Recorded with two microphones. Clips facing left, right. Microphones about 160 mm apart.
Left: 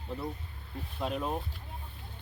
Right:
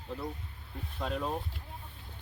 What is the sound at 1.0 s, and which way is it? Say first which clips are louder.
Speech: left 1 dB; 15° left (ahead or behind).